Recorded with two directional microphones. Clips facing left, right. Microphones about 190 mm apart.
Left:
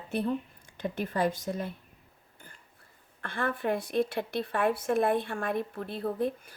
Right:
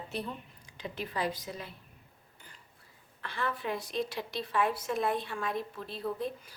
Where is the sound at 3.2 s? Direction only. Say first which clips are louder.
Left 4 dB; 50° left (ahead or behind).